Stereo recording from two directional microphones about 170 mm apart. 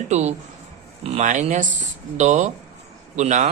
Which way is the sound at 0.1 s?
40° right (ahead or behind).